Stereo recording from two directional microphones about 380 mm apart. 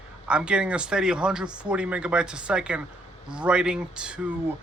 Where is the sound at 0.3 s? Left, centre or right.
Centre.